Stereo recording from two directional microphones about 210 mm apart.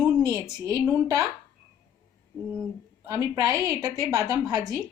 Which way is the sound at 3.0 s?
15° right (ahead or behind).